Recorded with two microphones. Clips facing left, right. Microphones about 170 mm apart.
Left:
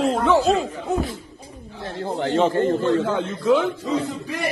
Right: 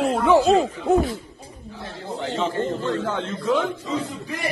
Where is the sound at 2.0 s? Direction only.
60° left (ahead or behind).